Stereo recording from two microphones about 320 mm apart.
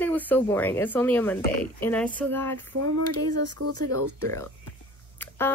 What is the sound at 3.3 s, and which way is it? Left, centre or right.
Speech, right.